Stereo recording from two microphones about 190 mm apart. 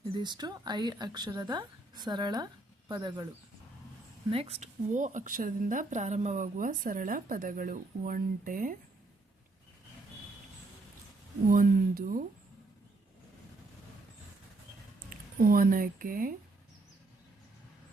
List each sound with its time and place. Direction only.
0.2 s speech: 20° right (ahead or behind)
4.3 s a woman's voice: 30° right (ahead or behind)
11.4 s a woman's voice: 45° right (ahead or behind)
15.1 s speech: 50° right (ahead or behind)